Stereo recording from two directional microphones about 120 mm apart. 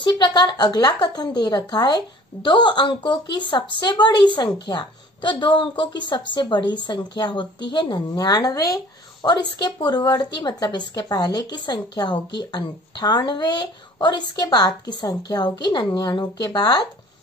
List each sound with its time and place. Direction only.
0.0 s a woman's voice: 40° left (ahead or behind)